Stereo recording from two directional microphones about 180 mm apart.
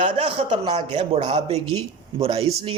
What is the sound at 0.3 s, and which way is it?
A man's voice, 30° right (ahead or behind).